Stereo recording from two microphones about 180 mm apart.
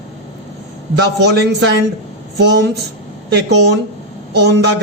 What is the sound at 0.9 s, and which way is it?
A man's voice, 70° right (ahead or behind).